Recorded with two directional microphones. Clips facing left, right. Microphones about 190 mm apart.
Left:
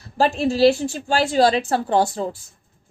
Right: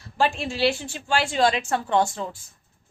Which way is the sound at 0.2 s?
40° left (ahead or behind).